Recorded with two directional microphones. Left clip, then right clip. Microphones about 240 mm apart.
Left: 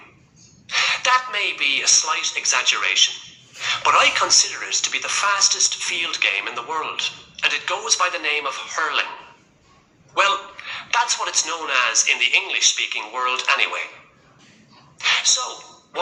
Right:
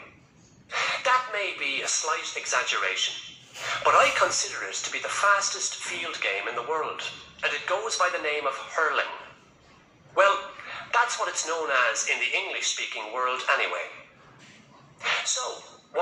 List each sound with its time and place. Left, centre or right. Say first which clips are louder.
0.7 s a man's voice: left 6 dB; left
10.2 s a man's voice: left 2 dB; left
15.0 s a sound: left 8 dB; left